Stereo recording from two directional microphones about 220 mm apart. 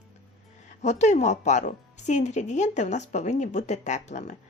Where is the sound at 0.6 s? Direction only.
35° left (ahead or behind).